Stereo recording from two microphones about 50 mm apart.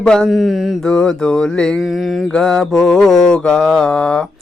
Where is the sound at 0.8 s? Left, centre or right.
Centre.